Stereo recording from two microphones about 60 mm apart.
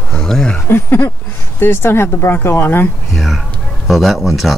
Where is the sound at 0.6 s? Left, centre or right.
Left.